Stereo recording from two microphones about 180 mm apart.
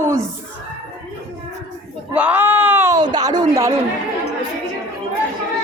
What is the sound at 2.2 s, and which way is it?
Speech, 10° right (ahead or behind).